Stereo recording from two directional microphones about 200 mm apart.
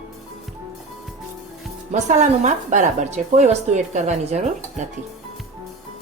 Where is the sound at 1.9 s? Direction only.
35° right (ahead or behind).